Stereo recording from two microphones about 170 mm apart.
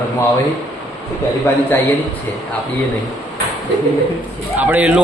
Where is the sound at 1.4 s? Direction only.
10° left (ahead or behind).